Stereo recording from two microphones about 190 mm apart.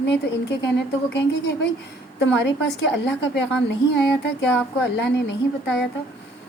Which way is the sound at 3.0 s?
65° left (ahead or behind).